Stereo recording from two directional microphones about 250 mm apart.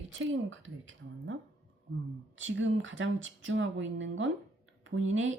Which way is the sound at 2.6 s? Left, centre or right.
Right.